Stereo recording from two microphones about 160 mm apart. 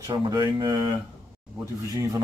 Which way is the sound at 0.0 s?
25° right (ahead or behind).